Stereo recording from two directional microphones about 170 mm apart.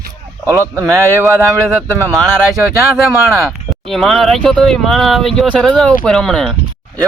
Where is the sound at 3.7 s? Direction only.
Centre (ahead or behind).